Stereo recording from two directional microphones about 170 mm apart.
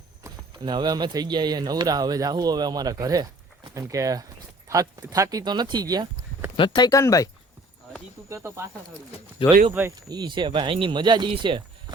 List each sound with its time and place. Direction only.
0.2 s speech: 20° right (ahead or behind)
6.6 s speech: 25° left (ahead or behind)
8.3 s speech: 15° right (ahead or behind)
9.4 s speech: 30° left (ahead or behind)
9.9 s speech: 25° right (ahead or behind)